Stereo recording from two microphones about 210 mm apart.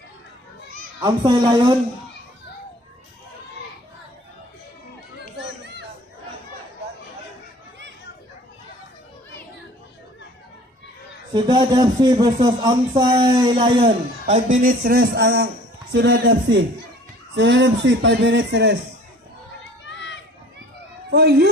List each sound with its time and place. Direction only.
1.0 s speech: 20° right (ahead or behind)
5.4 s children playing: 55° right (ahead or behind)
11.3 s speech: 20° right (ahead or behind); by 18.8 s 55° right (ahead or behind)
19.8 s run: 60° left (ahead or behind)
21.1 s cat: 50° right (ahead or behind)